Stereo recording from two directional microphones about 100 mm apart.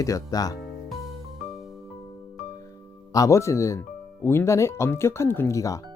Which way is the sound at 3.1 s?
30° left (ahead or behind).